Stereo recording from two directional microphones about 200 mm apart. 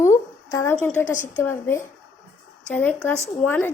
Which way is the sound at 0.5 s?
10° left (ahead or behind).